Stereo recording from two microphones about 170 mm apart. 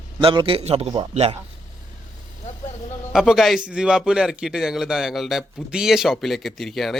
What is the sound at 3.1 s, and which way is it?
A man's voice, centre (ahead or behind).